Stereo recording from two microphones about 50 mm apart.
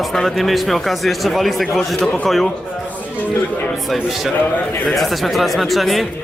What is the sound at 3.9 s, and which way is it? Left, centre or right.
Speech, centre.